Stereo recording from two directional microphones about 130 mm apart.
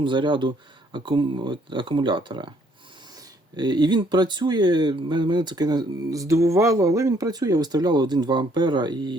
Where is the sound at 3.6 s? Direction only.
35° right (ahead or behind).